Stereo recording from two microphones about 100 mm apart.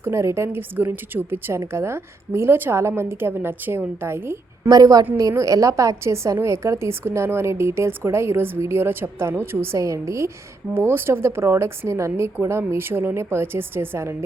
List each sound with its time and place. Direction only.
0.0 s a woman's voice: 25° right (ahead or behind)
4.7 s a woman's voice: 40° right (ahead or behind)